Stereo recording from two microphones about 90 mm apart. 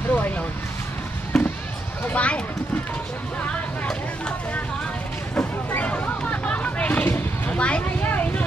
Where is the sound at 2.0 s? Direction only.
15° left (ahead or behind).